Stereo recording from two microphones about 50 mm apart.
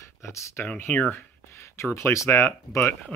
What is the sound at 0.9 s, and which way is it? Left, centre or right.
Speech, left.